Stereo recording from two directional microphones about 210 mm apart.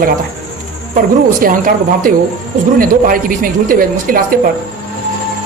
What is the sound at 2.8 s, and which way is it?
Speech, 40° right (ahead or behind).